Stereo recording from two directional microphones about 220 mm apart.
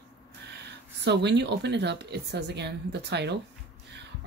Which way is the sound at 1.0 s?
50° right (ahead or behind).